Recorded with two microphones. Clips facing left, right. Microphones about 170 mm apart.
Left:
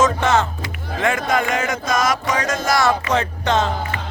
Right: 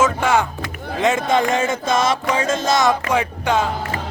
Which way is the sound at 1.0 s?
25° right (ahead or behind).